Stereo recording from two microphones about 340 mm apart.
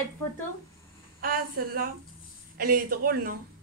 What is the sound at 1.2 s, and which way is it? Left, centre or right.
Speech, right.